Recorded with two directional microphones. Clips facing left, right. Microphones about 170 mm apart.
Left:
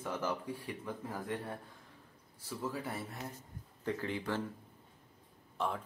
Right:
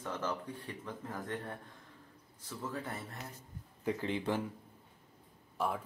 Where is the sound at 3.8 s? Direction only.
20° right (ahead or behind).